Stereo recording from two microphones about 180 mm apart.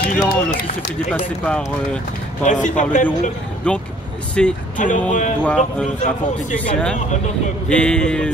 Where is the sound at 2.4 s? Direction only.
45° left (ahead or behind).